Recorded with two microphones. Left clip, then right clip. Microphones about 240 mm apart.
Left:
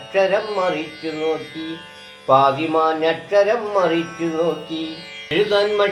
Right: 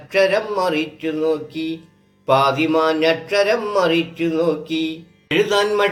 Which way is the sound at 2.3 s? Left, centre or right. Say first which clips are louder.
Left 1 dB; right.